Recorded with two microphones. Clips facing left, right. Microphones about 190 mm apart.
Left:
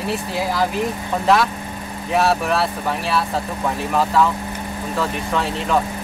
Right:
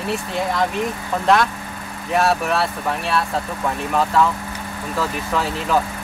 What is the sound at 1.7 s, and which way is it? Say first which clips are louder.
Vehicle: left 3 dB; 20° left (ahead or behind).